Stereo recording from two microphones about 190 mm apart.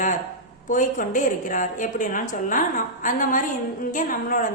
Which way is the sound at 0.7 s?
45° left (ahead or behind).